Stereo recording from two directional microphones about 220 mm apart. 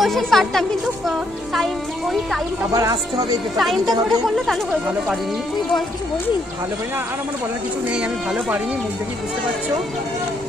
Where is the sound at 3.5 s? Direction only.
Centre (ahead or behind).